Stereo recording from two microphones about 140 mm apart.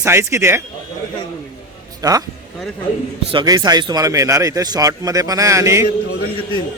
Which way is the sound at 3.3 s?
30° right (ahead or behind).